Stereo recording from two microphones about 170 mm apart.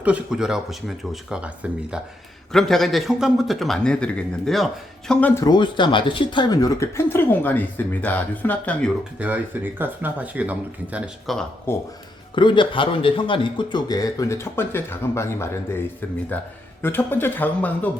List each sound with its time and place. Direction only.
0.0 s a man's voice: 5° right (ahead or behind)
5.3 s a man's voice: 20° left (ahead or behind)
9.1 s speech: 10° right (ahead or behind)
11.7 s speech: 15° left (ahead or behind)
12.3 s a man's voice: 30° left (ahead or behind)
16.8 s speech: 10° left (ahead or behind)